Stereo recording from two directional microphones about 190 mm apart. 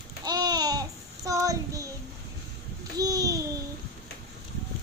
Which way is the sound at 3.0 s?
20° right (ahead or behind).